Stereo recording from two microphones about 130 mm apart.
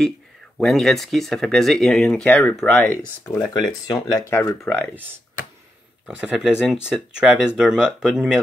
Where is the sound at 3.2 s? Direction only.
30° left (ahead or behind); by 4.8 s 15° left (ahead or behind).